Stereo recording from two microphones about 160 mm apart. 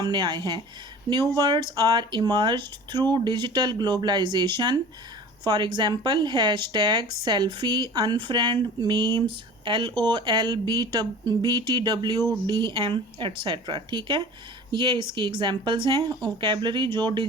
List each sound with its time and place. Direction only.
0.0 s speech: 30° right (ahead or behind)